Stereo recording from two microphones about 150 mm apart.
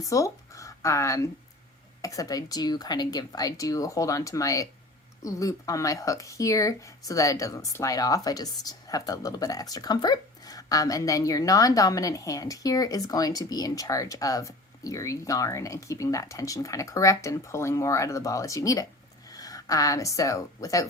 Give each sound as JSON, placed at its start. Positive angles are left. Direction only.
{"t": 0.0, "sound": "speech", "side_deg": 20}